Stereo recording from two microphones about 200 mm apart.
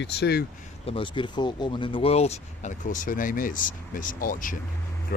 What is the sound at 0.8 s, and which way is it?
Speech, 25° left (ahead or behind).